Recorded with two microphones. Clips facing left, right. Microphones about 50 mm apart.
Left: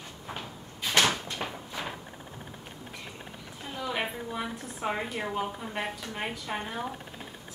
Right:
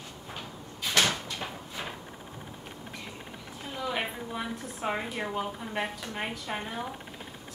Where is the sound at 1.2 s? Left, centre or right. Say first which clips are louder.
Left 2 dB; left.